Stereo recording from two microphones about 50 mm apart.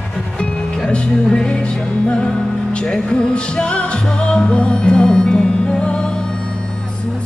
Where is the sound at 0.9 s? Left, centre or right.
Centre.